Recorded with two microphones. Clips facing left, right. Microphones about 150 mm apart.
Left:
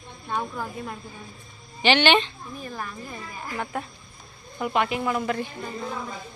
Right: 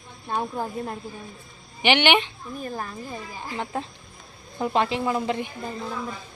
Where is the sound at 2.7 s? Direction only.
30° right (ahead or behind).